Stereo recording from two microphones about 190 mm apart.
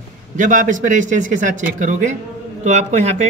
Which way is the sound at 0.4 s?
40° right (ahead or behind).